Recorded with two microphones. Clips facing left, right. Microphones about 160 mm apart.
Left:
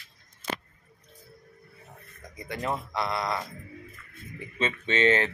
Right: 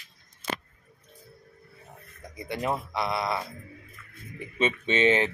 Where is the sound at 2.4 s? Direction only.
20° right (ahead or behind).